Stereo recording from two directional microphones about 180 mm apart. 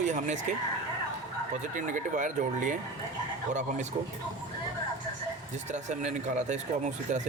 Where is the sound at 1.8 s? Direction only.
45° right (ahead or behind).